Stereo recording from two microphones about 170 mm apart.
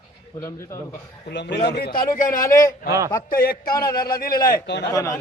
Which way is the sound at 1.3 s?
80° left.